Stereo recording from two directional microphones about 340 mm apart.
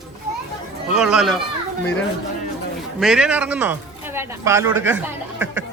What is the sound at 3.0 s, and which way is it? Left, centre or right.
A man's voice, centre.